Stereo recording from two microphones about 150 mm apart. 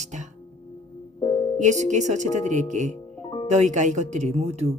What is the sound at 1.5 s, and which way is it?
Speech, 50° right (ahead or behind).